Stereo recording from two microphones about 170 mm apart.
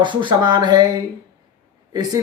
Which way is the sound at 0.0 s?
30° right (ahead or behind).